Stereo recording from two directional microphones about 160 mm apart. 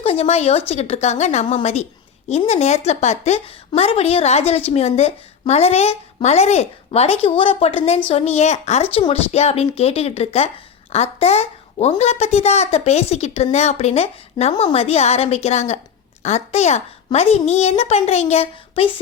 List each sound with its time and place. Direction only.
0.0 s a woman's voice: 40° left (ahead or behind)